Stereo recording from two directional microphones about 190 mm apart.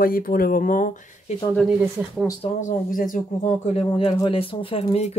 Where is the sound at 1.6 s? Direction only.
5° right (ahead or behind).